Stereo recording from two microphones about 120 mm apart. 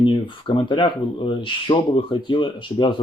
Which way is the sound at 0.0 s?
45° left (ahead or behind).